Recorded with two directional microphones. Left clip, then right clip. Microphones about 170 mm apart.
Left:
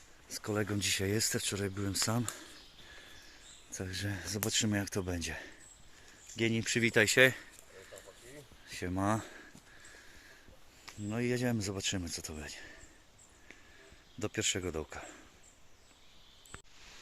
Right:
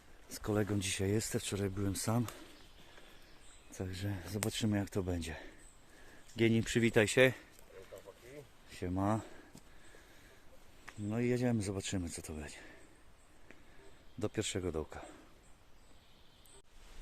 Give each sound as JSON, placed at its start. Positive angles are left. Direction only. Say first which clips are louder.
{"t": 0.3, "sound": "speech", "louder": "even", "side_deg": -20}
{"t": 3.7, "sound": "speech", "louder": "left 4 dB", "side_deg": 5}
{"t": 6.3, "sound": "speech", "louder": "even", "side_deg": -30}
{"t": 7.0, "sound": "a sound", "louder": "left 4 dB", "side_deg": -5}
{"t": 8.7, "sound": "speech", "louder": "left 2 dB", "side_deg": 5}
{"t": 11.1, "sound": "speech", "louder": "left 1 dB", "side_deg": 0}
{"t": 14.2, "sound": "speech", "louder": "left 3 dB", "side_deg": -5}